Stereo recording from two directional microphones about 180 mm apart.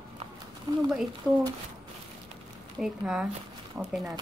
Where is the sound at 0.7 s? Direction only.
20° right (ahead or behind).